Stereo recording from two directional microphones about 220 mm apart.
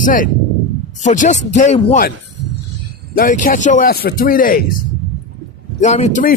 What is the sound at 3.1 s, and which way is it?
Speech, 40° left (ahead or behind).